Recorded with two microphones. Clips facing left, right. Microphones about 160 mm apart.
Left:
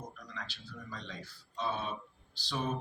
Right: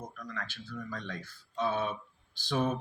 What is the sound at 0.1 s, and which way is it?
Speech, 50° right (ahead or behind).